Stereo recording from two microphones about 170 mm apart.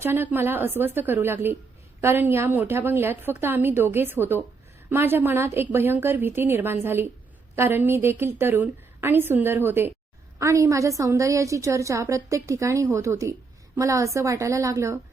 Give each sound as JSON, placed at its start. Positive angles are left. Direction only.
{"t": 0.0, "sound": "a woman's voice", "side_deg": -15}